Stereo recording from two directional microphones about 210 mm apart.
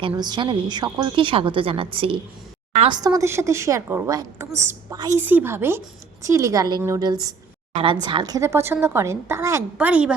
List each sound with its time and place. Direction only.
0.2 s a woman's voice: 20° right (ahead or behind); by 10.2 s 5° right (ahead or behind)